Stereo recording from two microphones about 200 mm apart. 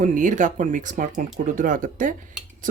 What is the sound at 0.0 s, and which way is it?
Speech, 40° right (ahead or behind).